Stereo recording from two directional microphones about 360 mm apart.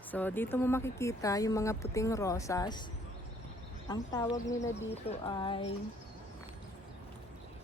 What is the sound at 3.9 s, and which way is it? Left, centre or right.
Speech, centre.